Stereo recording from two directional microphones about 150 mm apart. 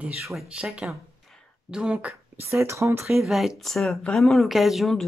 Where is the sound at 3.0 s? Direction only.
Centre (ahead or behind).